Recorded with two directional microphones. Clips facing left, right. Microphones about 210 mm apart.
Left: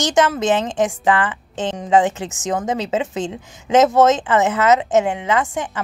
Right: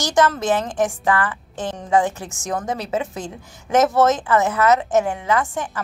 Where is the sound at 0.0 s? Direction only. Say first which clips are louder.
Left 2 dB; 20° left (ahead or behind).